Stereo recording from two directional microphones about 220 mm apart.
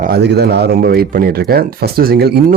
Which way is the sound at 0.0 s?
45° right (ahead or behind).